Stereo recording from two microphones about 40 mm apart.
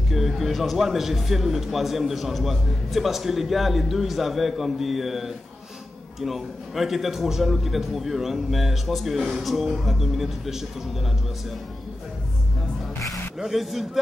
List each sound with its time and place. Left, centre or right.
0.1 s speech: centre
13.4 s speech: centre